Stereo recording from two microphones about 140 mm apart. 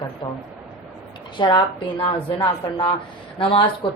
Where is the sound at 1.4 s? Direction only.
35° left (ahead or behind).